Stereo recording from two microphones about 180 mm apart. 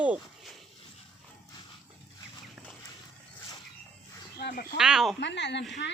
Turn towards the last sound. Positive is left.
turn(degrees=75)  # may be behind; listen again after turning